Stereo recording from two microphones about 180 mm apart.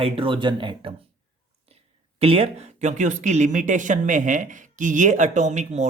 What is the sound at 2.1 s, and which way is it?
Speech, 35° right (ahead or behind).